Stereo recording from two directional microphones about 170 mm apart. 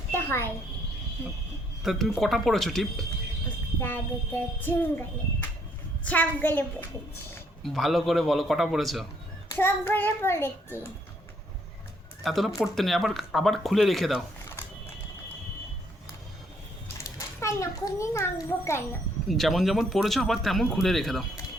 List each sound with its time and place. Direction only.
0.1 s a sound: 15° left (ahead or behind)
1.8 s speech: centre (ahead or behind)
3.8 s a child's voice: 10° left (ahead or behind)
9.5 s a child's voice: 15° left (ahead or behind)
12.2 s speech: centre (ahead or behind)
17.0 s a child's voice: 15° left (ahead or behind)
19.3 s speech: centre (ahead or behind)